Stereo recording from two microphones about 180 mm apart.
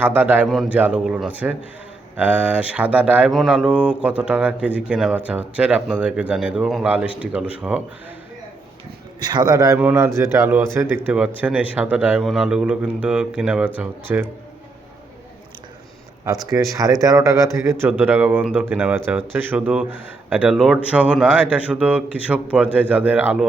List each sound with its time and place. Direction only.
0.0 s speech: 10° right (ahead or behind)
9.2 s speech: 25° right (ahead or behind)
16.2 s speech: 20° right (ahead or behind)